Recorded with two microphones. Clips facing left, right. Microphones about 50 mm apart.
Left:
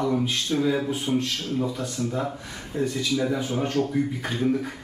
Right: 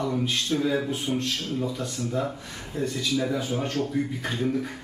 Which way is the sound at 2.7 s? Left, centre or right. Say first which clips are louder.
Left 2 dB; centre.